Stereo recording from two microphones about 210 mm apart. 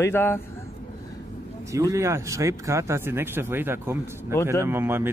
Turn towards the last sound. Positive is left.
turn(degrees=-10)  # may be behind; listen again after turning